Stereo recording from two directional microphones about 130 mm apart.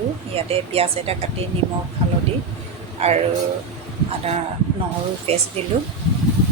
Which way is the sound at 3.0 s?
55° right (ahead or behind).